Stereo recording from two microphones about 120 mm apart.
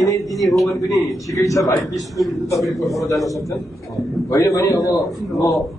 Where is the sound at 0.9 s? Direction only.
25° left (ahead or behind).